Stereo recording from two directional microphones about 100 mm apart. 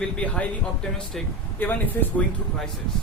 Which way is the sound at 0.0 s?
15° left (ahead or behind).